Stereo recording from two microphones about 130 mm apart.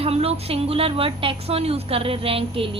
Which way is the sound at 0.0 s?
50° right (ahead or behind).